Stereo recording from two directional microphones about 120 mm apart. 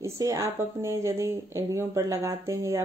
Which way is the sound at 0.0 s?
25° right (ahead or behind).